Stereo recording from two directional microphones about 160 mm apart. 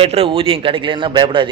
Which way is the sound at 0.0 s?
35° right (ahead or behind).